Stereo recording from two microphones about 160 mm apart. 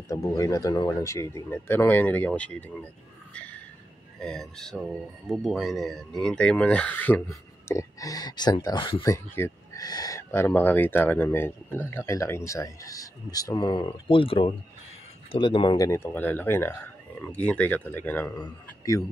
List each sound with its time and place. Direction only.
0.1 s speech: 20° left (ahead or behind)
3.3 s a sound: 10° left (ahead or behind)
4.2 s speech: 5° left (ahead or behind); by 19.0 s 20° left (ahead or behind)